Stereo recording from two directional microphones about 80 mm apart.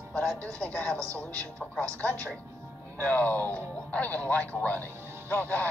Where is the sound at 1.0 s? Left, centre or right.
Right.